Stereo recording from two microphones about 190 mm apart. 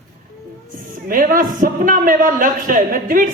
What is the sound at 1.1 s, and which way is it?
A man's voice, 45° right (ahead or behind).